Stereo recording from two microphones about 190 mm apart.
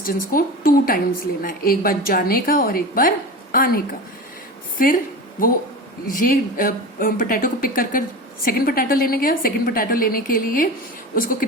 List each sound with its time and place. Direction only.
0.0 s a woman's voice: 50° left (ahead or behind)
6.1 s a woman's voice: 50° left (ahead or behind)